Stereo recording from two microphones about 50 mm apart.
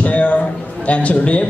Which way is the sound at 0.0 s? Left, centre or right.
Left.